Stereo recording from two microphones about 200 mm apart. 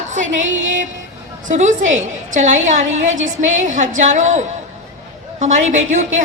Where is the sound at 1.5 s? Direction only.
35° right (ahead or behind).